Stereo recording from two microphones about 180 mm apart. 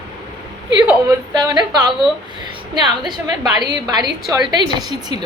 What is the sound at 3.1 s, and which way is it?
A woman's voice, 25° right (ahead or behind).